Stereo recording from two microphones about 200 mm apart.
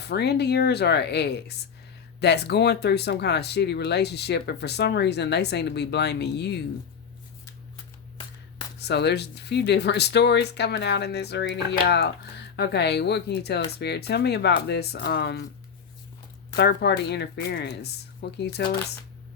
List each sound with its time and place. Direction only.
0.1 s speech: 55° left (ahead or behind)
8.8 s speech: 55° left (ahead or behind)
16.6 s speech: 55° left (ahead or behind)